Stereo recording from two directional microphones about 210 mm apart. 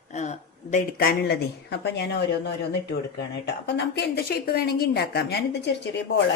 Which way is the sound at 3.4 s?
55° left (ahead or behind).